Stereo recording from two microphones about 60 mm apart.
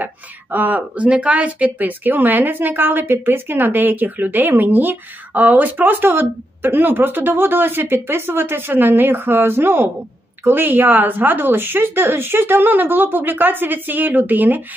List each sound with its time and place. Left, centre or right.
0.0 s speech: right